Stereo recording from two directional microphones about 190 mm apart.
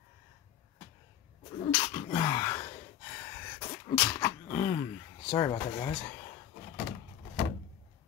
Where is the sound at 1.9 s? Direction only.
25° left (ahead or behind).